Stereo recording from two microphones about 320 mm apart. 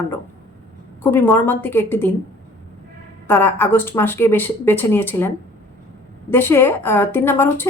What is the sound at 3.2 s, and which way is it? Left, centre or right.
Speech, centre.